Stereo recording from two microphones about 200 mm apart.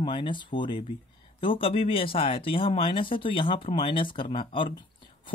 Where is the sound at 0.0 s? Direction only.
25° left (ahead or behind).